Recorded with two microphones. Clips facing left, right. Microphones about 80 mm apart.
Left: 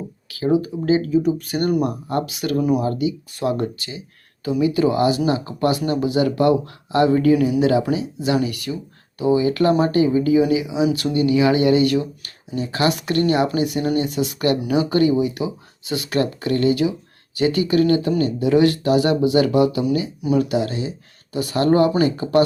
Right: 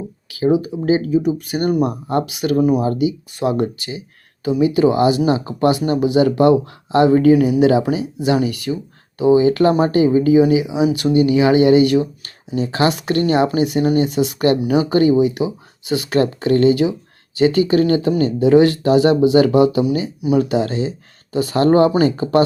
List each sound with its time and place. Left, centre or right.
0.3 s speech: centre
2.0 s speech: right